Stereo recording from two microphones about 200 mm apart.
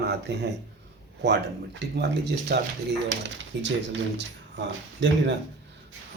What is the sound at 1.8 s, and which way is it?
Speech, 55° right (ahead or behind).